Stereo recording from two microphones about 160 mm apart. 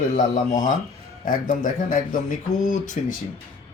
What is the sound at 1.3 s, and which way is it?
A man's voice, 55° left (ahead or behind).